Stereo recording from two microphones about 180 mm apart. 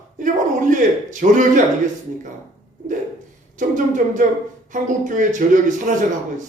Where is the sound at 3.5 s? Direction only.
45° right (ahead or behind).